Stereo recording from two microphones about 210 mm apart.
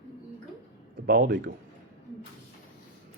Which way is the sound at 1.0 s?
45° right (ahead or behind).